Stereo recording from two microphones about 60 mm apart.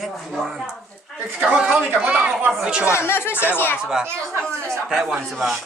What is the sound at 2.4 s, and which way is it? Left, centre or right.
Speech, right.